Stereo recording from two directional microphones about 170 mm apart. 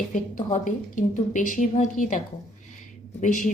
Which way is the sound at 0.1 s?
45° left (ahead or behind).